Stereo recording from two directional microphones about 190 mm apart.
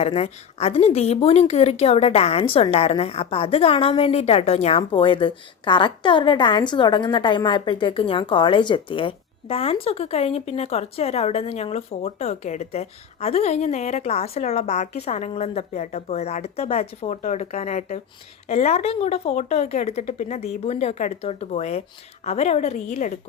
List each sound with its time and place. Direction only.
0.0 s a woman's voice: 30° left (ahead or behind)